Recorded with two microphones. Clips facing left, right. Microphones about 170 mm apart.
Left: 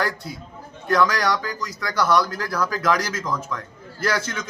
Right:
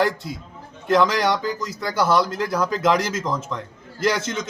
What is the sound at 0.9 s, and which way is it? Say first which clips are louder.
A man's voice: right 2 dB; 25° right (ahead or behind).